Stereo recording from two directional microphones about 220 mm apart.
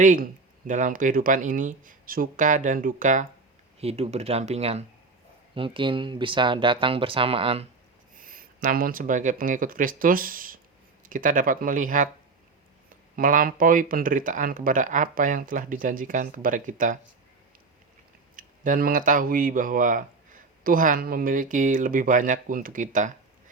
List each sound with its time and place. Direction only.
0.0 s speech: 35° right (ahead or behind)
8.1 s speech: 40° right (ahead or behind)
13.1 s speech: 40° right (ahead or behind)
18.3 s speech: 40° right (ahead or behind)